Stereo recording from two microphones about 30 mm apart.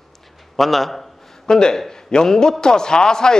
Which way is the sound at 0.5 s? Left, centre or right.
Centre.